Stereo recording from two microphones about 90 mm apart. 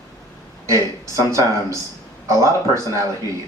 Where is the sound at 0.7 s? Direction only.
35° right (ahead or behind).